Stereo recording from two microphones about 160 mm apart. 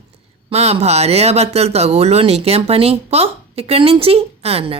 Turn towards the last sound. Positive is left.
turn(degrees=-35)  # may be behind; listen again after turning